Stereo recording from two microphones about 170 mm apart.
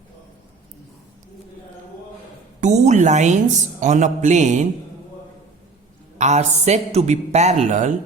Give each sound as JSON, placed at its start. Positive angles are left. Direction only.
{"t": 2.6, "sound": "a man's voice", "side_deg": -45}
{"t": 6.1, "sound": "speech", "side_deg": -40}